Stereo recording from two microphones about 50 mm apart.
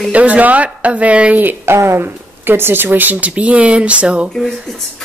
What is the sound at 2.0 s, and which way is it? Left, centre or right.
Speech, right.